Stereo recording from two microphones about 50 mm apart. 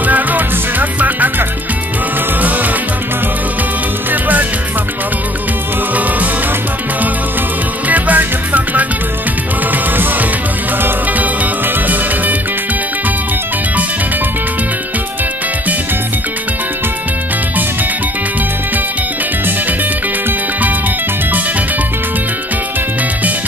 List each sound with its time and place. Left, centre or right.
0.0 s music: right
2.4 s music: right
4.1 s music: right
7.9 s music: right
11.1 s music: right